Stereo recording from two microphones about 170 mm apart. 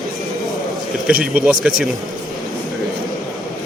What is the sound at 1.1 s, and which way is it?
Speech, 5° right (ahead or behind).